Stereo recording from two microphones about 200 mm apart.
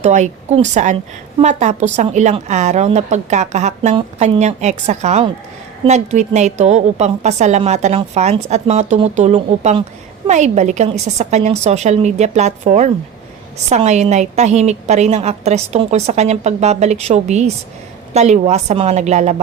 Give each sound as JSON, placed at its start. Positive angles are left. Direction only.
{"t": 0.0, "sound": "a woman's voice", "side_deg": -35}